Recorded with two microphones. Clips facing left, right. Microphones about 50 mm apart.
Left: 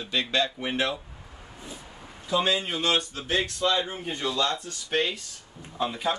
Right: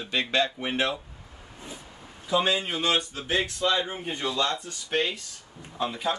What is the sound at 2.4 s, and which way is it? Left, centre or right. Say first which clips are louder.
Speech: even; centre.